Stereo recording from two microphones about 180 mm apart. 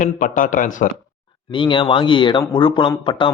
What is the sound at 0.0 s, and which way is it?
Speech, 45° left (ahead or behind).